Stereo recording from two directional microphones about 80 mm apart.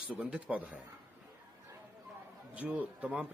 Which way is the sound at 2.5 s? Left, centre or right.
Centre.